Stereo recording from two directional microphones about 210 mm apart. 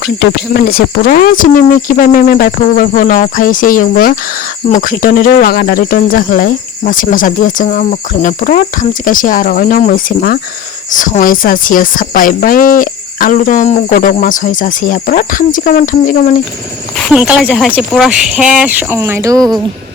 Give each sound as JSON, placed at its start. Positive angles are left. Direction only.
{"t": 0.3, "sound": "speech", "side_deg": 45}
{"t": 17.1, "sound": "speech", "side_deg": -5}